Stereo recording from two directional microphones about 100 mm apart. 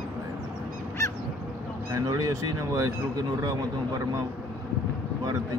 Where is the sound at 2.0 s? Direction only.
40° right (ahead or behind).